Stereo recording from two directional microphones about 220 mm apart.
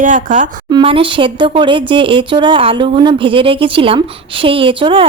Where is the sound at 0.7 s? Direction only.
20° right (ahead or behind).